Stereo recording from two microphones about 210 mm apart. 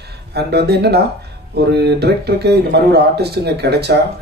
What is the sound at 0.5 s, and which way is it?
Speech, 50° right (ahead or behind).